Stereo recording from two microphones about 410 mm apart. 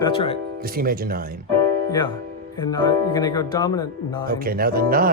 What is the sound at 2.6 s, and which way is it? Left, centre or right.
Speech, centre.